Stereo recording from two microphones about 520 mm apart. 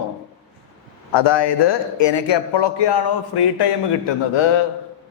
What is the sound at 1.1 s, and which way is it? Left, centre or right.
A man's voice, left.